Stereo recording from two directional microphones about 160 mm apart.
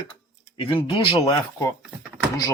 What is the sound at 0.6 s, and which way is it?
Speech, 35° left (ahead or behind).